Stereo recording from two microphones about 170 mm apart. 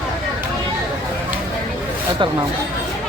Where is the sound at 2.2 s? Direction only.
30° right (ahead or behind).